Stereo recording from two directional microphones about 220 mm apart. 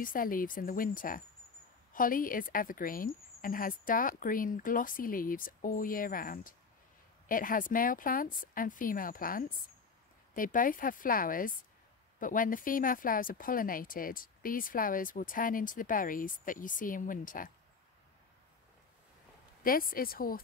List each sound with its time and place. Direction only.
0.0 s speech: 40° left (ahead or behind)
19.6 s speech: 40° left (ahead or behind)